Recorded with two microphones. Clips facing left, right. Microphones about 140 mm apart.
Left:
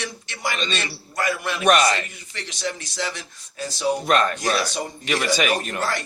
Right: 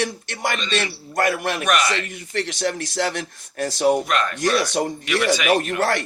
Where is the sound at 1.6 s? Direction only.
35° left (ahead or behind).